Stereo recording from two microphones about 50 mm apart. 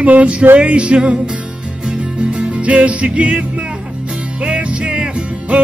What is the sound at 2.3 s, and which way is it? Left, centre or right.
Music, right.